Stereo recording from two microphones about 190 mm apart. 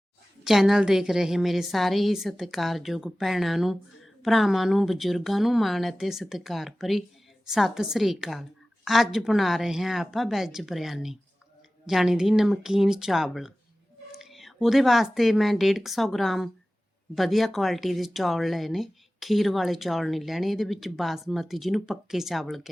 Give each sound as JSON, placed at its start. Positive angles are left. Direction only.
{"t": 0.4, "sound": "a woman's voice", "side_deg": 0}